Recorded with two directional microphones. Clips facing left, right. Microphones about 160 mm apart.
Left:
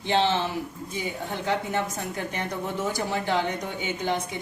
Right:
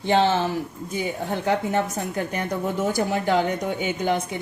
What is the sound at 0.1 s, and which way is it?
A woman's voice, 45° right (ahead or behind).